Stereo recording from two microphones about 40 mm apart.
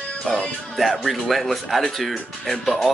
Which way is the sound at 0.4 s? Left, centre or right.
Centre.